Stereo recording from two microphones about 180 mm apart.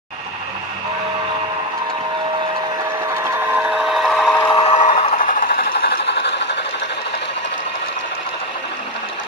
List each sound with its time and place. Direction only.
3.2 s vehicle: 15° right (ahead or behind); by 4.5 s 5° left (ahead or behind)
4.5 s vehicle: 30° left (ahead or behind)
4.7 s vehicle: 45° left (ahead or behind)
5.0 s train: 45° left (ahead or behind); by 6.6 s 75° left (ahead or behind)